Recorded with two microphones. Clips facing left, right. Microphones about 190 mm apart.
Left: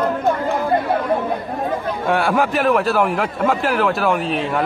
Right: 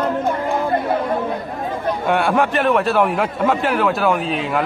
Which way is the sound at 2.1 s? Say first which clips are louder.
Even; centre (ahead or behind).